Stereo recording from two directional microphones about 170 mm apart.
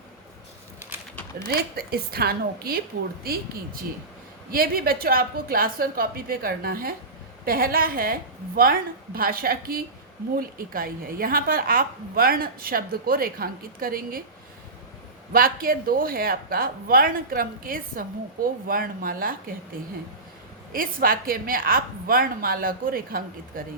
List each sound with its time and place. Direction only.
1.5 s a woman's voice: 65° right (ahead or behind)
4.5 s a woman's voice: 60° right (ahead or behind)
15.3 s a woman's voice: 55° right (ahead or behind)
20.7 s a woman's voice: 55° right (ahead or behind)